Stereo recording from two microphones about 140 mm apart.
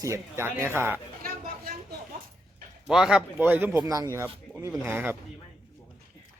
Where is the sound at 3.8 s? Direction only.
25° right (ahead or behind).